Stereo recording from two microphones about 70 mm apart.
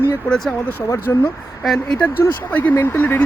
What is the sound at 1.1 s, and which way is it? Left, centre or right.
Speech, left.